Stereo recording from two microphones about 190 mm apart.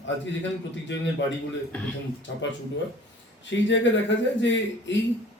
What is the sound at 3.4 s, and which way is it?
A man's voice, 70° left (ahead or behind).